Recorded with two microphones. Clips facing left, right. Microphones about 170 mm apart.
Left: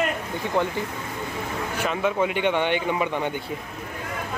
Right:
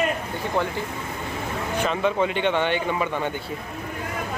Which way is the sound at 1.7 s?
10° left (ahead or behind).